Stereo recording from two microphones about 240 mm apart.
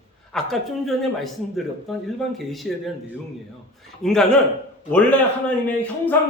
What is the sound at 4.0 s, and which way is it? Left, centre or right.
Speech, centre.